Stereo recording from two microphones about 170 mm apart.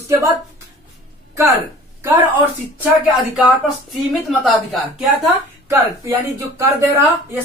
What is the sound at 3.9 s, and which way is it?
A woman's voice, centre (ahead or behind).